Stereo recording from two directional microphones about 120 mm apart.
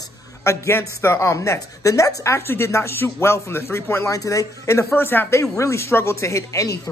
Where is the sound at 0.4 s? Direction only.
20° left (ahead or behind).